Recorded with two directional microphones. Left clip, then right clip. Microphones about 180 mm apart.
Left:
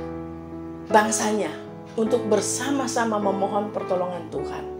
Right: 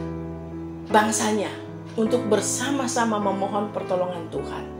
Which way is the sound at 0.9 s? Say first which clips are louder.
Left 1 dB; 35° left (ahead or behind).